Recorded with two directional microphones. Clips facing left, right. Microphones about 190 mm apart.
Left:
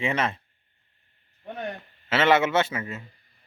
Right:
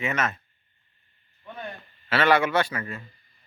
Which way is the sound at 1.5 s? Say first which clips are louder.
Left 4 dB; 70° left (ahead or behind).